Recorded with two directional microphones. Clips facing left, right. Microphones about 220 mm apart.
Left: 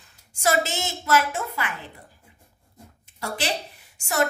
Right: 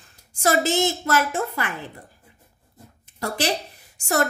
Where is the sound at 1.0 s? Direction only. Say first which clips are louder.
Right 1 dB; 50° right (ahead or behind).